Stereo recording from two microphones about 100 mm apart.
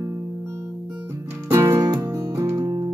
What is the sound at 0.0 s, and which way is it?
Music, 30° right (ahead or behind).